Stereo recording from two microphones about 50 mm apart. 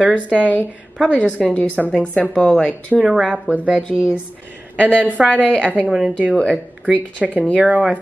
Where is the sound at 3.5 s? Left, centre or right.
Right.